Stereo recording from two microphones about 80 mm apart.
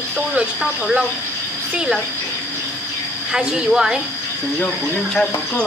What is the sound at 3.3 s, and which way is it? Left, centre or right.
Speech, centre.